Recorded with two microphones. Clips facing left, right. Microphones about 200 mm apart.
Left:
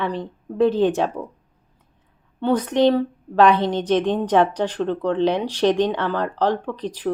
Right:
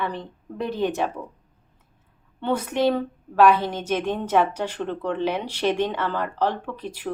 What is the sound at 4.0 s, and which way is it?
Speech, 15° left (ahead or behind).